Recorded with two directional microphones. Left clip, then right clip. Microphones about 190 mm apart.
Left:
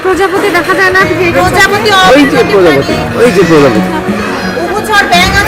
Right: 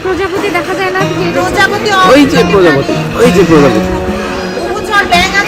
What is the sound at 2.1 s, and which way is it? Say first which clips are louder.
Speech: left 1 dB; 5° right (ahead or behind).